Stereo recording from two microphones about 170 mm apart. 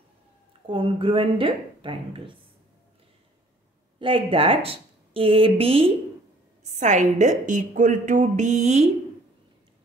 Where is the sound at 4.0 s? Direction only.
30° right (ahead or behind).